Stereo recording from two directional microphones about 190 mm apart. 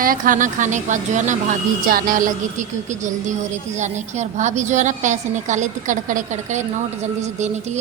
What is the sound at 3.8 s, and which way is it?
A woman's voice, 40° right (ahead or behind).